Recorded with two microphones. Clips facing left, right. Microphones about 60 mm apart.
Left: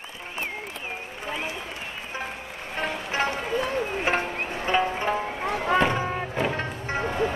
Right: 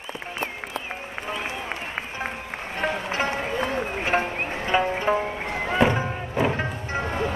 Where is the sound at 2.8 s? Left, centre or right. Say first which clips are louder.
Right 5 dB; centre.